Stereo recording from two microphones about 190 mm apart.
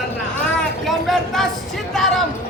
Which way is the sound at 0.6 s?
Centre (ahead or behind).